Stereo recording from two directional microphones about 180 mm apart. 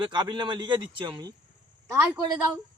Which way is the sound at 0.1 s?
25° right (ahead or behind).